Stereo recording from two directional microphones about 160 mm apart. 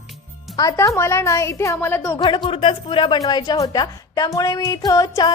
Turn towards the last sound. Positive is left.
turn(degrees=20)  # may be behind; listen again after turning